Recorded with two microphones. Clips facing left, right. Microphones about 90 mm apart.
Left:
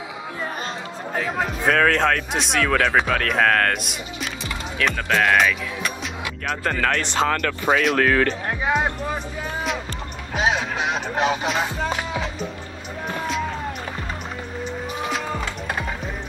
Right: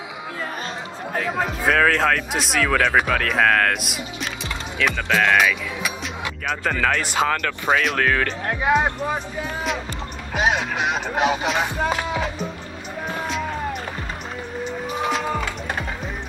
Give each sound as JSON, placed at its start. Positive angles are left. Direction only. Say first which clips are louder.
{"t": 1.1, "sound": "speech", "louder": "right 1 dB", "side_deg": 0}
{"t": 8.0, "sound": "speech", "louder": "left 2 dB", "side_deg": 45}
{"t": 8.5, "sound": "speech", "louder": "right 2 dB", "side_deg": 0}
{"t": 10.3, "sound": "music", "louder": "right 1 dB", "side_deg": -5}
{"t": 11.6, "sound": "speech", "louder": "right 2 dB", "side_deg": -15}